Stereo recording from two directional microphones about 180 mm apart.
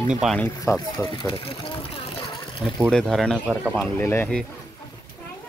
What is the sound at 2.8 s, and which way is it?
Speech, centre (ahead or behind).